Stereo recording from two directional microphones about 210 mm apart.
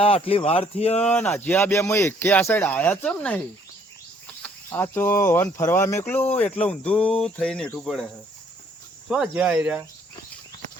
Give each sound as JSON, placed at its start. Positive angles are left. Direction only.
{"t": 0.0, "sound": "speech", "side_deg": 25}
{"t": 1.0, "sound": "speech", "side_deg": 10}
{"t": 4.4, "sound": "speech", "side_deg": 10}
{"t": 9.0, "sound": "speech", "side_deg": -5}